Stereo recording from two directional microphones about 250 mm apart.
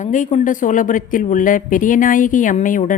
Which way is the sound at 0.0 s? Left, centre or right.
Left.